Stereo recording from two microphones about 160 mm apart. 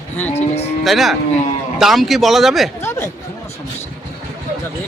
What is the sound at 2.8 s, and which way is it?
Speech, 15° left (ahead or behind).